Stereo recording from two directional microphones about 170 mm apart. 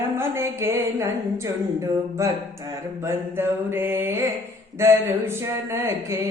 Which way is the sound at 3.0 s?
15° right (ahead or behind).